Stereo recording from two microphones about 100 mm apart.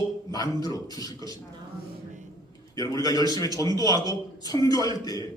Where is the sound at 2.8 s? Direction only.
40° left (ahead or behind).